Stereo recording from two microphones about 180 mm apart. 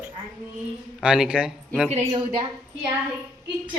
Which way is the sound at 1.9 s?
35° right (ahead or behind).